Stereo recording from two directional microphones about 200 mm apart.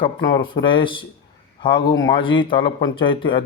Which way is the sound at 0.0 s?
25° left (ahead or behind).